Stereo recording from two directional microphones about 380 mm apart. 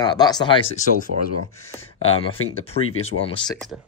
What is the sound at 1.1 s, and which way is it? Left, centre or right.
Speech, right.